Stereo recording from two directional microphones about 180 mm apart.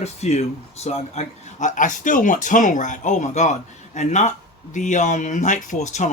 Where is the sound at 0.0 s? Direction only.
35° left (ahead or behind).